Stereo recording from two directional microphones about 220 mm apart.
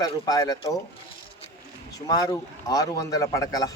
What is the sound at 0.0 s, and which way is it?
Speech, 15° left (ahead or behind).